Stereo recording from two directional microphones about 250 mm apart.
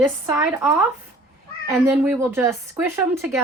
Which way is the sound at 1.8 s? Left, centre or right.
Centre.